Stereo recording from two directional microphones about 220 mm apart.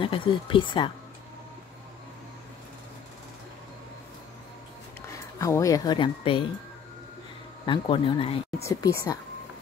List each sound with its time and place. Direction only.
0.0 s speech: 25° left (ahead or behind)
5.4 s speech: 15° left (ahead or behind)
7.6 s speech: 20° left (ahead or behind)
8.6 s speech: 15° left (ahead or behind)